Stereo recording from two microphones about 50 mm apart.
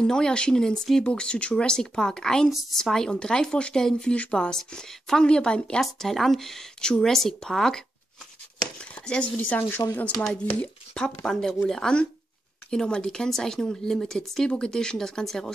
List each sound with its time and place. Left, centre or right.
0.0 s speech: centre
5.8 s speech: centre
8.9 s a sound: left
9.6 s speech: left
10.4 s speech: left
11.0 s speech: centre